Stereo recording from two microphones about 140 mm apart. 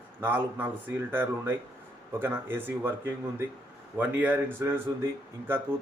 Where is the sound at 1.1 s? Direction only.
15° right (ahead or behind).